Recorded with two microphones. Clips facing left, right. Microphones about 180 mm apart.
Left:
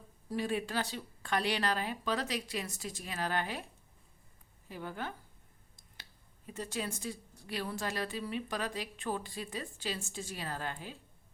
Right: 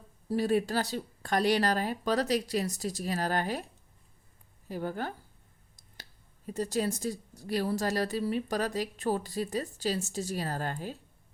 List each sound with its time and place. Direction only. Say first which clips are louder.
0.3 s speech: right 7 dB; 40° right (ahead or behind)
4.7 s speech: right 6 dB; 40° right (ahead or behind)